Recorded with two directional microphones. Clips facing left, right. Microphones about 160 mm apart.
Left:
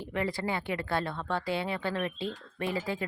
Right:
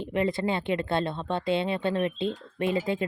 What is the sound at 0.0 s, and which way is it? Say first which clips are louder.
Speech: right 5 dB; 20° right (ahead or behind).